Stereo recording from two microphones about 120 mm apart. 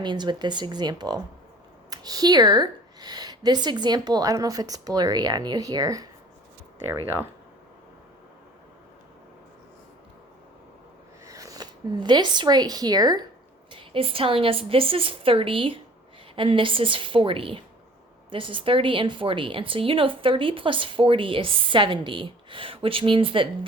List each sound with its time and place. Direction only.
0.0 s speech: 40° right (ahead or behind)
11.3 s speech: 30° right (ahead or behind)
13.7 s a woman's voice: 45° right (ahead or behind)